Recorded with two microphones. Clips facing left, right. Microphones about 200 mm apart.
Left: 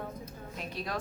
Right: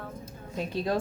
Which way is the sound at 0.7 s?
25° right (ahead or behind).